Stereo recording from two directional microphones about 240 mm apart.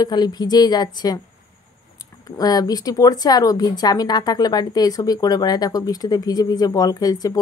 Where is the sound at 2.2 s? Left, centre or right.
Centre.